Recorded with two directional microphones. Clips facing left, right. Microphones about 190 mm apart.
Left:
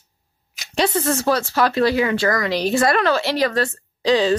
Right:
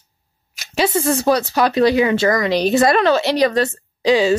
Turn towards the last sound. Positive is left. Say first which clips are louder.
# right 2 dB
turn(degrees=-10)  # may be behind; listen again after turning